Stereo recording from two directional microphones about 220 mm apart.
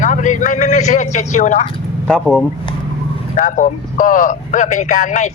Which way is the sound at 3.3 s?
35° left (ahead or behind).